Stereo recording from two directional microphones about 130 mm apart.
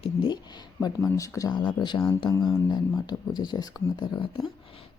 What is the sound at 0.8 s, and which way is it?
Speech, 25° left (ahead or behind).